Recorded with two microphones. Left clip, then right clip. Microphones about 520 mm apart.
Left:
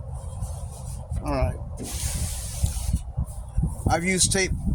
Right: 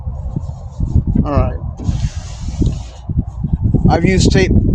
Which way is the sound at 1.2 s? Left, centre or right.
Centre.